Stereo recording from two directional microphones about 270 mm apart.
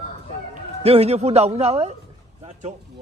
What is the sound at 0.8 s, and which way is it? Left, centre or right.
A man's voice, right.